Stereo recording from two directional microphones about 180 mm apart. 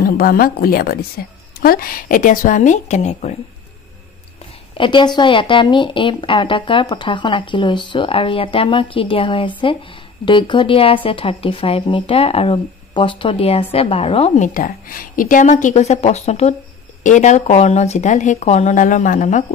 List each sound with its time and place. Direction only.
0.0 s a woman's voice: 55° left (ahead or behind); by 3.3 s 40° left (ahead or behind)
4.7 s a woman's voice: 25° left (ahead or behind); by 19.4 s 45° left (ahead or behind)